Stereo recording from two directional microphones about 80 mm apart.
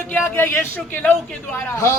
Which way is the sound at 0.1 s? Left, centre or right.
Left.